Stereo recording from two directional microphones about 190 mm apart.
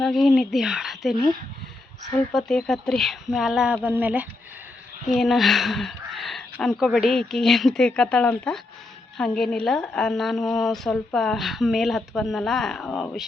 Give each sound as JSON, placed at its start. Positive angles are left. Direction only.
{"t": 0.0, "sound": "a woman's voice", "side_deg": 0}
{"t": 2.3, "sound": "a woman's voice", "side_deg": 5}